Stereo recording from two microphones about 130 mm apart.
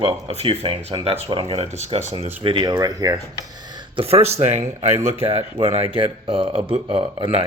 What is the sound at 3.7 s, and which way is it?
Speech, 45° right (ahead or behind).